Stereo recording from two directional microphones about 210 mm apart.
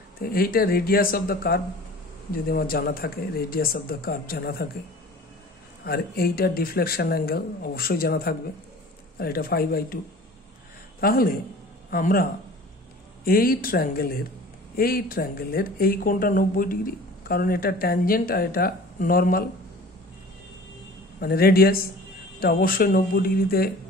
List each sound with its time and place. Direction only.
0.2 s speech: 45° left (ahead or behind)
5.9 s speech: 45° left (ahead or behind)
11.0 s speech: 45° left (ahead or behind)
21.2 s speech: 45° left (ahead or behind)